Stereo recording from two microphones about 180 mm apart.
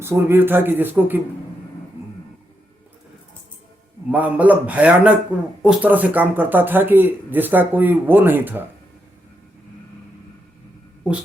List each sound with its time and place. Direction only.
0.0 s speech: 15° right (ahead or behind)
4.1 s speech: 10° right (ahead or behind)
11.1 s speech: 5° right (ahead or behind)